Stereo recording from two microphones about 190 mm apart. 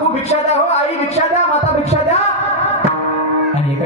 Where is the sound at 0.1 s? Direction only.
35° left (ahead or behind).